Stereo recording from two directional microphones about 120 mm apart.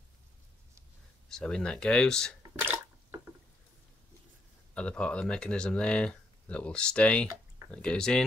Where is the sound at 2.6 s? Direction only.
15° right (ahead or behind).